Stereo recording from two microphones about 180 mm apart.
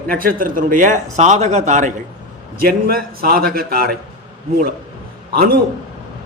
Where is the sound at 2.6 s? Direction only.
55° right (ahead or behind).